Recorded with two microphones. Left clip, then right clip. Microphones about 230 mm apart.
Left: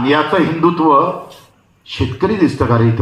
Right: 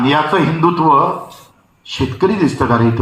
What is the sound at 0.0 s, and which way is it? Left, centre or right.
A man's voice, right.